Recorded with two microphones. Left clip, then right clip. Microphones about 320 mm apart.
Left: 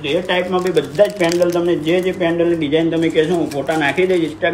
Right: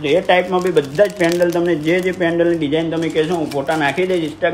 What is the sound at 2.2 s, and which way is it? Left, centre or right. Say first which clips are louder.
A man's voice: even; right.